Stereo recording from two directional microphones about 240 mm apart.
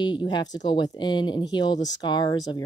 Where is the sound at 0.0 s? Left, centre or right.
Centre.